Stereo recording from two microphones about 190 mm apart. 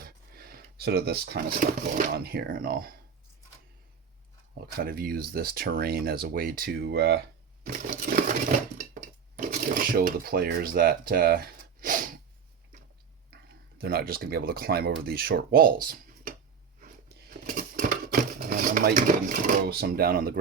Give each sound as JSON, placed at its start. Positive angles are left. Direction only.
{"t": 0.0, "sound": "a sound", "side_deg": -50}
{"t": 2.1, "sound": "speech", "side_deg": -55}
{"t": 4.8, "sound": "speech", "side_deg": -50}
{"t": 7.6, "sound": "speech", "side_deg": -50}
{"t": 13.3, "sound": "speech", "side_deg": -55}
{"t": 16.8, "sound": "a sound", "side_deg": -50}